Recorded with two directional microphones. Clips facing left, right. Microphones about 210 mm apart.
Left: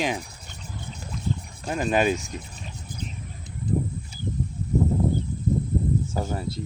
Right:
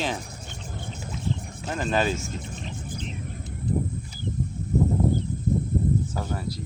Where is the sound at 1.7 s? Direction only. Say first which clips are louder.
Left 3 dB; 15° left (ahead or behind).